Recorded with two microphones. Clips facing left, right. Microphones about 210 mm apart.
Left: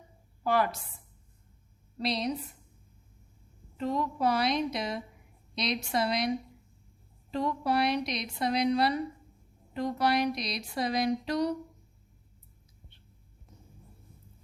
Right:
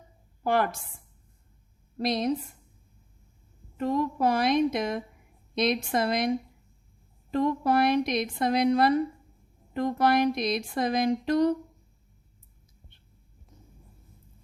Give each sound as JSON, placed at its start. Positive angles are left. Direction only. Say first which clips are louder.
{"t": 0.4, "sound": "speech", "louder": "right 2 dB", "side_deg": -50}
{"t": 2.0, "sound": "speech", "louder": "right 4 dB", "side_deg": -50}
{"t": 3.8, "sound": "speech", "louder": "right 4 dB", "side_deg": -50}